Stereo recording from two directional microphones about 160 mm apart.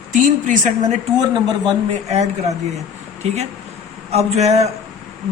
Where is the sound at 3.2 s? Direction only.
40° right (ahead or behind).